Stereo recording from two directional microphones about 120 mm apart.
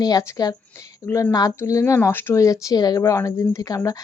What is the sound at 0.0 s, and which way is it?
Speech, 30° left (ahead or behind).